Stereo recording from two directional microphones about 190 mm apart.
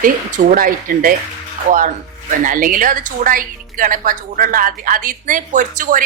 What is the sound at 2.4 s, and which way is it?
Speech, 45° right (ahead or behind).